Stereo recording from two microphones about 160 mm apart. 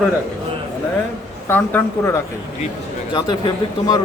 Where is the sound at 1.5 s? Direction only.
15° left (ahead or behind).